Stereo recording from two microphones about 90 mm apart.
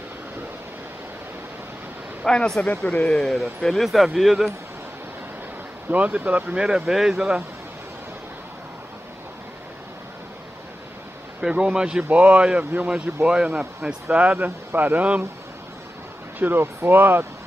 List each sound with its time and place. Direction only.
2.2 s speech: 10° left (ahead or behind)
5.9 s speech: 15° right (ahead or behind)
11.4 s speech: 10° right (ahead or behind)
16.3 s speech: 25° right (ahead or behind)